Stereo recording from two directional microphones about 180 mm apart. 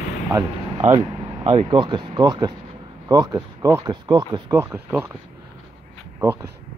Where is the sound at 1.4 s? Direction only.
30° right (ahead or behind); by 5.1 s 10° right (ahead or behind).